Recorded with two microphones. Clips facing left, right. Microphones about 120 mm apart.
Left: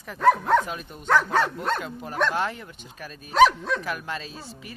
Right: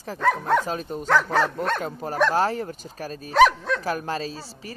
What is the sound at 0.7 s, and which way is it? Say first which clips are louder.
Speech: right 7 dB; 35° right (ahead or behind).